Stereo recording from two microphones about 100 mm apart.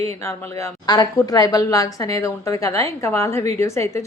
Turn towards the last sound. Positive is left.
turn(degrees=30)  # may be behind; listen again after turning